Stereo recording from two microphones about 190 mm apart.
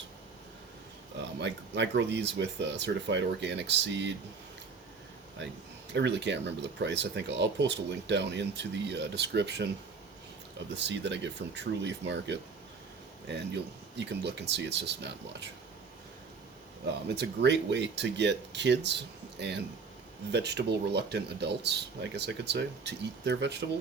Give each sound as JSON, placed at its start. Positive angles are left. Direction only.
{"t": 1.2, "sound": "speech", "side_deg": -70}
{"t": 5.9, "sound": "speech", "side_deg": -65}
{"t": 10.8, "sound": "speech", "side_deg": -65}
{"t": 14.5, "sound": "speech", "side_deg": -65}
{"t": 17.1, "sound": "speech", "side_deg": -60}